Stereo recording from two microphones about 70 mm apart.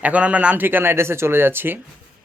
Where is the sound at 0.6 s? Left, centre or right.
Right.